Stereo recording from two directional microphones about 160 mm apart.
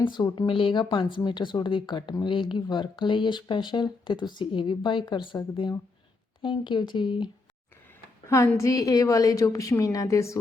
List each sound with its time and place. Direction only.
0.0 s speech: 30° left (ahead or behind)
8.3 s speech: 15° left (ahead or behind)